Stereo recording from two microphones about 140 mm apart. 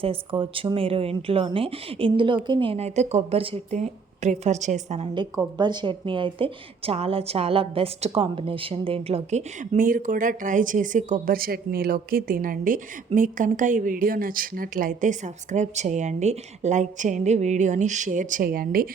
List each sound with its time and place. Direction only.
0.0 s speech: 40° right (ahead or behind); by 5.0 s 55° right (ahead or behind)
5.1 s speech: 30° right (ahead or behind)
9.6 s a woman's voice: 75° right (ahead or behind)